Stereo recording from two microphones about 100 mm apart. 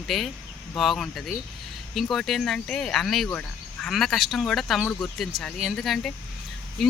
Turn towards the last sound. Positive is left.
turn(degrees=5)  # may be behind; listen again after turning